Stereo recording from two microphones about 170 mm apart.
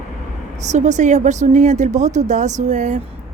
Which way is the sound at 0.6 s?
45° right (ahead or behind).